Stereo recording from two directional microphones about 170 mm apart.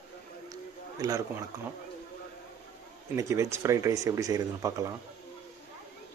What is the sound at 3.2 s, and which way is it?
Speech, 15° right (ahead or behind).